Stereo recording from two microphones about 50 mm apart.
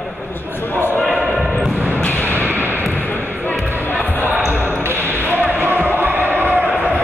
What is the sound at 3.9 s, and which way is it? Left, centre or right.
Music, left.